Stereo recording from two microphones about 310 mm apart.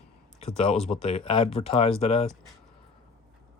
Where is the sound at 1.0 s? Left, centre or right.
Centre.